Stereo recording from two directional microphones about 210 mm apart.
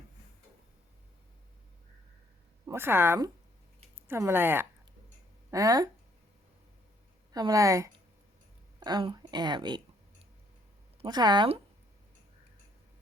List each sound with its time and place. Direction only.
2.6 s a woman's voice: 10° right (ahead or behind)
7.3 s a woman's voice: 15° right (ahead or behind)
11.0 s speech: 20° right (ahead or behind)